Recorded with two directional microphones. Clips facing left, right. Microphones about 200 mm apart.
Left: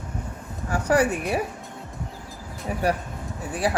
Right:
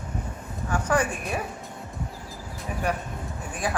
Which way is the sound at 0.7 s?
40° left (ahead or behind).